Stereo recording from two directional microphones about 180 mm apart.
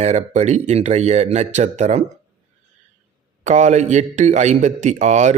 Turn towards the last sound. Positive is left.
turn(degrees=-40)  # may be behind; listen again after turning